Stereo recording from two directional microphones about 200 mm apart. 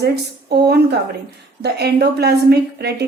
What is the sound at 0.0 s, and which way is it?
A woman's voice, 55° right (ahead or behind).